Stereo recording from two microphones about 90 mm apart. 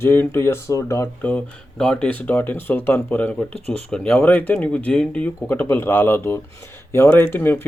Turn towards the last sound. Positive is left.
turn(degrees=25)  # may be behind; listen again after turning